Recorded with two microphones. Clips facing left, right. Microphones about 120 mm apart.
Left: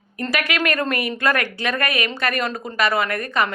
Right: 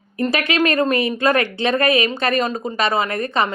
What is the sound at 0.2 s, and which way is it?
A woman's voice, 25° right (ahead or behind).